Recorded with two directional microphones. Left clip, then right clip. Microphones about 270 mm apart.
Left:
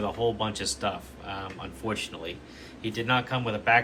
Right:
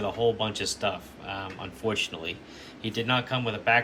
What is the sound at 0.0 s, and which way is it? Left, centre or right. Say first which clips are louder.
Speech: right 2 dB; centre.